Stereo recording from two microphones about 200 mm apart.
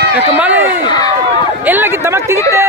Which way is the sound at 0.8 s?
20° left (ahead or behind).